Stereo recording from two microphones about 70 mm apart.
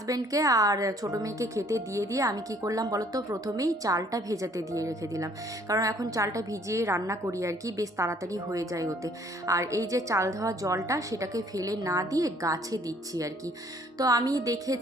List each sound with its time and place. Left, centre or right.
0.1 s speech: right